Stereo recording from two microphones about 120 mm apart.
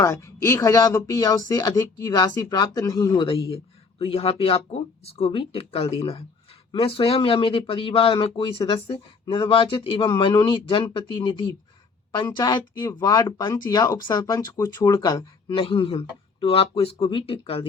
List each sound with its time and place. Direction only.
0.0 s speech: 25° left (ahead or behind); by 17.7 s 50° left (ahead or behind)